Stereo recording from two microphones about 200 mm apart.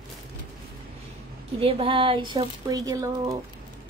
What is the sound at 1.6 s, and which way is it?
A woman's voice, 30° right (ahead or behind).